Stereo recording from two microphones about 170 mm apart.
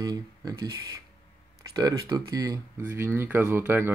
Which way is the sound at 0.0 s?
20° right (ahead or behind).